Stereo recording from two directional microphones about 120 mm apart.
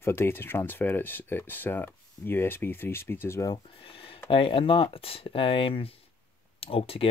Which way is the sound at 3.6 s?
45° left (ahead or behind).